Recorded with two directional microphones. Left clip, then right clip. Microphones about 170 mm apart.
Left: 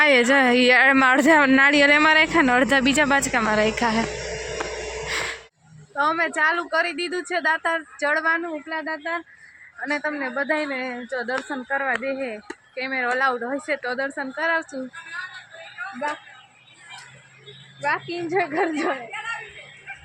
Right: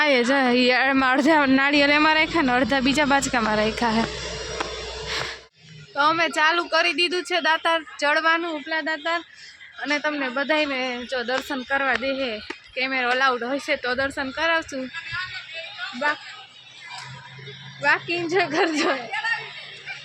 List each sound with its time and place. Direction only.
0.0 s speech: centre (ahead or behind)
5.0 s music: 5° right (ahead or behind)
5.9 s speech: 5° right (ahead or behind)
12.7 s speech: centre (ahead or behind)
17.8 s speech: 5° right (ahead or behind)